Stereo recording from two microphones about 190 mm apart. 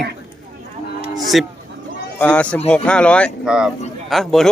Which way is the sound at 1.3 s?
Centre (ahead or behind).